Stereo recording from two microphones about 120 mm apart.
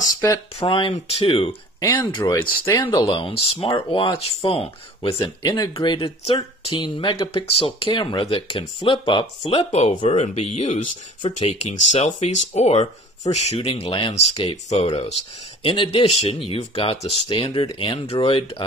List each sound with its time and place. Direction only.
0.0 s a sound: 25° left (ahead or behind)
0.6 s speech: 50° left (ahead or behind)
0.9 s speech: 60° left (ahead or behind)
1.8 s speech: 30° left (ahead or behind)
3.2 s speech: 50° left (ahead or behind)
5.0 s speech: 35° left (ahead or behind)
16.1 s speech: 60° left (ahead or behind)
17.6 s speech: 45° left (ahead or behind)